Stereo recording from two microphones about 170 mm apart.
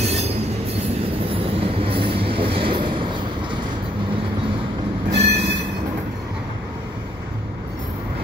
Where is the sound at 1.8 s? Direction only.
30° right (ahead or behind).